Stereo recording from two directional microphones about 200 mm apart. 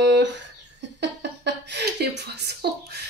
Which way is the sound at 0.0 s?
60° right (ahead or behind).